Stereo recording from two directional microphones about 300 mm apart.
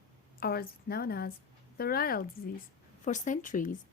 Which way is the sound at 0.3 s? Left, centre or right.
Left.